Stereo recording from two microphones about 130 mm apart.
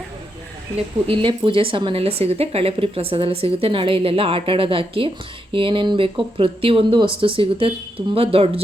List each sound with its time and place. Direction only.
1.0 s a woman's voice: 40° right (ahead or behind)